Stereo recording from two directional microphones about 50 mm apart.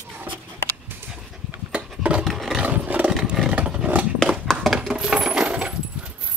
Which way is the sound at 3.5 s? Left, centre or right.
Right.